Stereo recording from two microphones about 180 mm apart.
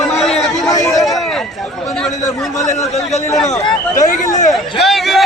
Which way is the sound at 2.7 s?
40° left (ahead or behind).